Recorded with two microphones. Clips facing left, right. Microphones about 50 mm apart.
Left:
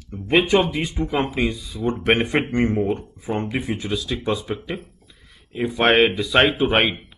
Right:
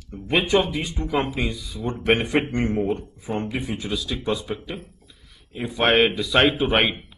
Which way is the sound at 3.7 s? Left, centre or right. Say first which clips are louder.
Left 2 dB; centre.